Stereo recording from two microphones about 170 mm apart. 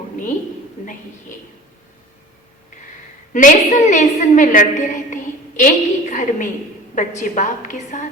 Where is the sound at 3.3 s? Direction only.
50° left (ahead or behind).